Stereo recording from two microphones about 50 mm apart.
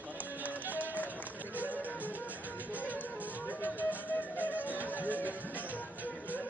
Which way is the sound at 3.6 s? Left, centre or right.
Left.